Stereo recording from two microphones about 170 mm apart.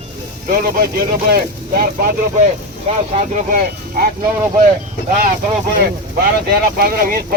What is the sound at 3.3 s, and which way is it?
Speech, 50° right (ahead or behind).